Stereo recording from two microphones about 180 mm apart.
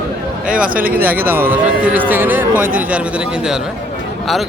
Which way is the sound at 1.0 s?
10° right (ahead or behind).